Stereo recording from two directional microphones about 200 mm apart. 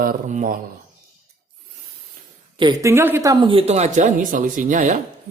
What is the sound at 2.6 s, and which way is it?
Speech, 20° right (ahead or behind).